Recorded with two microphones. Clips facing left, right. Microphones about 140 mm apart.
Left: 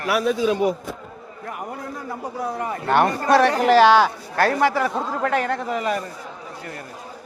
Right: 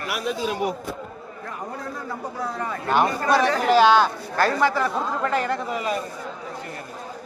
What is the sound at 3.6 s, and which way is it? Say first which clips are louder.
Speech: left 1 dB; 75° left (ahead or behind).